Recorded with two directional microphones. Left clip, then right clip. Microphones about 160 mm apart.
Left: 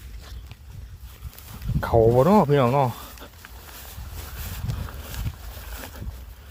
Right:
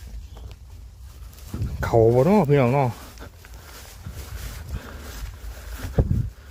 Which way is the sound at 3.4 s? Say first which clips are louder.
Left 1 dB; 85° left.